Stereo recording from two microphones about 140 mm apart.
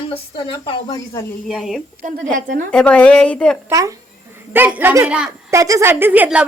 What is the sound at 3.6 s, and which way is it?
A woman's voice, 25° right (ahead or behind).